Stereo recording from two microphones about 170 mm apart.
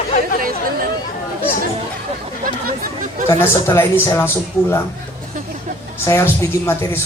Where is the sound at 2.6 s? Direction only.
55° right (ahead or behind).